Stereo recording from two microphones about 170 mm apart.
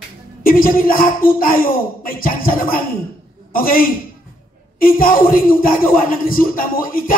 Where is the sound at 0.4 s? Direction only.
60° left (ahead or behind).